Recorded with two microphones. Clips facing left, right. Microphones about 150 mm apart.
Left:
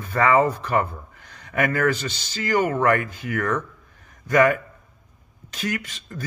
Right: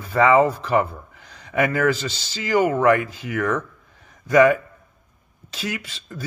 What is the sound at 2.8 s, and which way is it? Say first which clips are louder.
Speech: right 3 dB; 20° right (ahead or behind).